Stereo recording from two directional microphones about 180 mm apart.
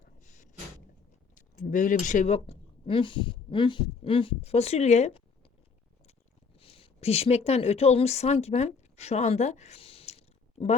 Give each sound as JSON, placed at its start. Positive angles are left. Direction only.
{"t": 0.0, "sound": "a sound", "side_deg": 45}
{"t": 1.4, "sound": "speech", "side_deg": 45}
{"t": 6.6, "sound": "speech", "side_deg": 30}